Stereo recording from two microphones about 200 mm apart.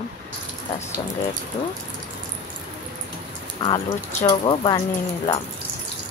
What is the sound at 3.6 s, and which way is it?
Speech, 20° left (ahead or behind).